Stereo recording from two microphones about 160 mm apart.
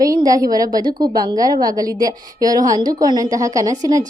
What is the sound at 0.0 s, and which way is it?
A woman's voice, 20° right (ahead or behind).